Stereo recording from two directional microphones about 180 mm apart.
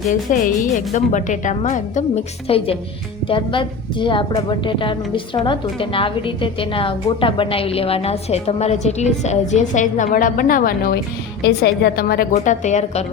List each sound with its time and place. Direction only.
0.1 s a woman's voice: 45° left (ahead or behind)
12.3 s a woman's voice: 40° left (ahead or behind)